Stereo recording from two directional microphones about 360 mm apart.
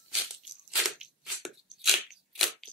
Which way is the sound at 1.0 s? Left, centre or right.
Centre.